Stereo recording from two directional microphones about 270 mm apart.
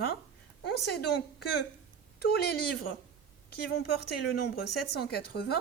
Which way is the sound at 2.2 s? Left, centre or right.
Left.